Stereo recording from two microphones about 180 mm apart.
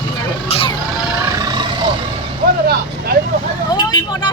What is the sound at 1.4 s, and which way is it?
Vehicle, 20° right (ahead or behind).